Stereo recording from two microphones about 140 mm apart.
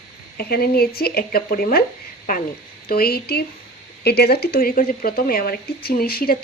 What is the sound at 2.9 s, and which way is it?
Speech, 90° left.